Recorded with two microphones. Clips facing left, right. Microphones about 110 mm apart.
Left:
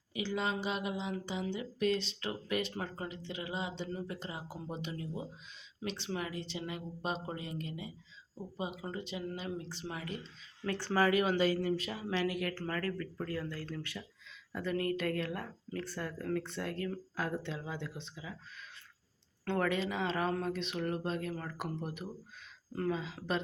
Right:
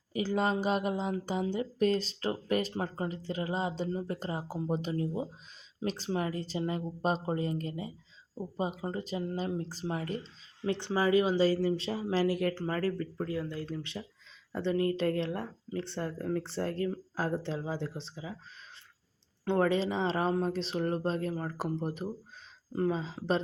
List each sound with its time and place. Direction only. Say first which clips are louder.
0.1 s speech: right 5 dB; 40° right (ahead or behind)
10.6 s speech: right 1 dB; 20° right (ahead or behind); by 12.5 s 35° right (ahead or behind)
12.5 s speech: right 5 dB; 25° right (ahead or behind)
19.5 s speech: right 5 dB; 30° right (ahead or behind)